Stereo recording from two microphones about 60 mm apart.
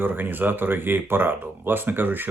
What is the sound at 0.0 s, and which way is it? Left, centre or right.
Speech, right.